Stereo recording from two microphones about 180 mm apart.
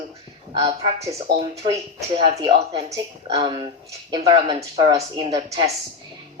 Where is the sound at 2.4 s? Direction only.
30° right (ahead or behind).